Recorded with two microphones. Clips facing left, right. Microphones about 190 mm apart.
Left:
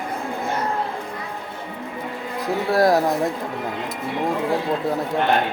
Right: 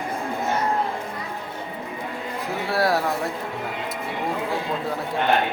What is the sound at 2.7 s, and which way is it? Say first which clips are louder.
Speech: left 5 dB; 45° left (ahead or behind).